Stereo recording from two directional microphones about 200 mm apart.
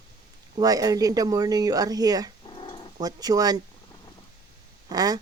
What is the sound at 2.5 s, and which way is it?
Dog, 25° left (ahead or behind).